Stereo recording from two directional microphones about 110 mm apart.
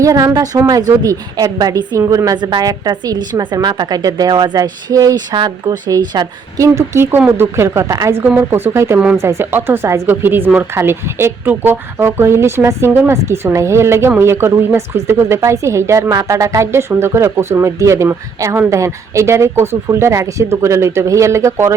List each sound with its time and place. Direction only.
0.0 s a woman's voice: 30° right (ahead or behind)
6.7 s speech: 20° right (ahead or behind)